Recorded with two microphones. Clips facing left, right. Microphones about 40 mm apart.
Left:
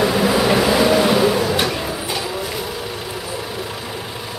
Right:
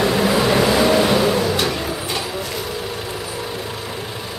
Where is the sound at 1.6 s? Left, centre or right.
Centre.